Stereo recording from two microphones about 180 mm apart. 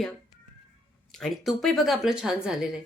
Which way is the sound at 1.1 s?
Centre (ahead or behind).